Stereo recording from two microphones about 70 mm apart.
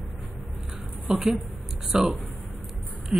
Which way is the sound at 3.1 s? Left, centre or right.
Centre.